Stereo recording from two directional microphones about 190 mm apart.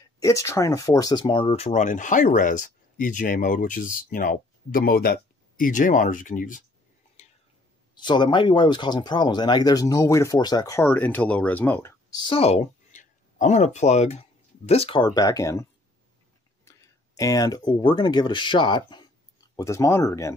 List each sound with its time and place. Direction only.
0.2 s speech: 15° left (ahead or behind); by 6.6 s 45° left (ahead or behind)
7.2 s a sound: 35° left (ahead or behind)
7.9 s speech: 25° left (ahead or behind)
16.6 s speech: 15° left (ahead or behind)